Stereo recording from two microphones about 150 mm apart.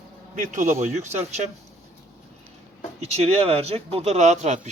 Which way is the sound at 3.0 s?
45° right (ahead or behind).